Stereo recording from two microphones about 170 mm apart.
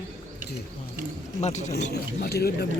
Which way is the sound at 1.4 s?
45° left (ahead or behind).